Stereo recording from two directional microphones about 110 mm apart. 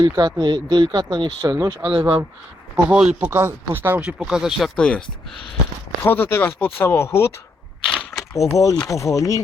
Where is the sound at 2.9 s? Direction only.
10° right (ahead or behind).